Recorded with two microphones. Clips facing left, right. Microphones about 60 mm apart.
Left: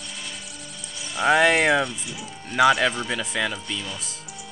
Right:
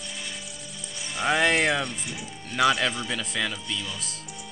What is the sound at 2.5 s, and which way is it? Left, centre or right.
Speech, centre.